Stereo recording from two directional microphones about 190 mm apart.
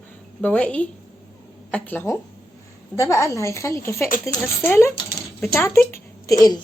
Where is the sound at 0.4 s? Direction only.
5° left (ahead or behind).